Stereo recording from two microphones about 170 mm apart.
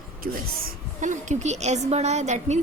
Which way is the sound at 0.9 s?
45° right (ahead or behind).